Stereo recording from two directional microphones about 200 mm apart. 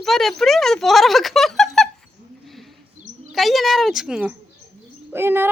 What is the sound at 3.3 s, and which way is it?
A woman's voice, centre (ahead or behind).